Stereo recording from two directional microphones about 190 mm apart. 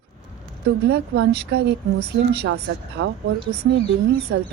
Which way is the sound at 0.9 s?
60° right (ahead or behind).